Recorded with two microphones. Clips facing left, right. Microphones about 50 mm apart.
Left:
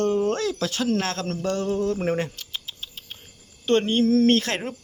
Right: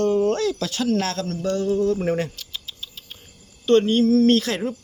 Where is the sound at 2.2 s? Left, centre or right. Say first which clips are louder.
Right 1 dB; left.